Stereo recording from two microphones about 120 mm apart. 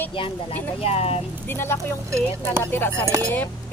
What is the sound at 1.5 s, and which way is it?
Speech, 20° left (ahead or behind).